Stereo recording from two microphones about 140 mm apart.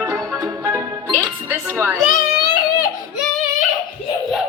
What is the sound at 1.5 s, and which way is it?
Speech, 20° right (ahead or behind).